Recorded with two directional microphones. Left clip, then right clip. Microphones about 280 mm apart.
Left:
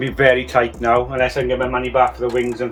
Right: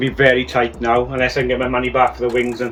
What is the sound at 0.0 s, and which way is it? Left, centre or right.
Speech, centre.